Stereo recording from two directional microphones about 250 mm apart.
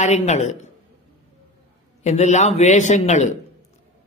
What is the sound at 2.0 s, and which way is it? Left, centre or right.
A man's voice, left.